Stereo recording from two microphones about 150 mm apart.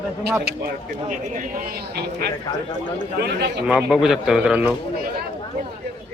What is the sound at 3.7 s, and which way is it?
A man's voice, 5° right (ahead or behind).